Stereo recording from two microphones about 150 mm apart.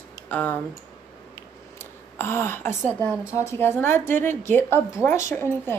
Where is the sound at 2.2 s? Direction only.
15° left (ahead or behind).